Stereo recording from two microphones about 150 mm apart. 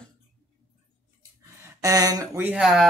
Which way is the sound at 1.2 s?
25° right (ahead or behind).